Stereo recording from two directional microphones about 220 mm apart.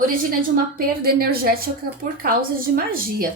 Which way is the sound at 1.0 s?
45° right (ahead or behind).